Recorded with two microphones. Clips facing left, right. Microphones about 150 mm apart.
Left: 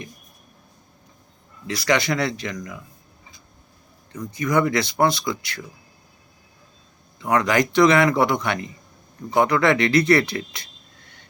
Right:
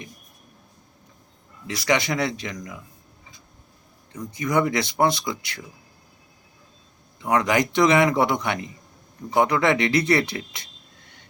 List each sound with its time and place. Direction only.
1.6 s a man's voice: 20° right (ahead or behind)
4.4 s a man's voice: 20° right (ahead or behind)
7.2 s a man's voice: 15° right (ahead or behind)